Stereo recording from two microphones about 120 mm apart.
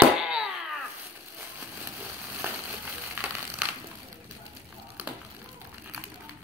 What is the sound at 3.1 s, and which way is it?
Crushing, 15° right (ahead or behind).